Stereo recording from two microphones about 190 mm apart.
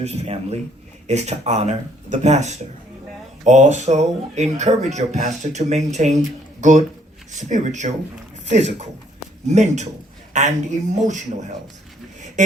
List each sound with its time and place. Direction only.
0.0 s speech: 35° right (ahead or behind)